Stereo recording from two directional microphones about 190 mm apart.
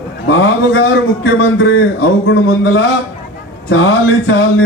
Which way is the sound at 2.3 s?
75° left (ahead or behind).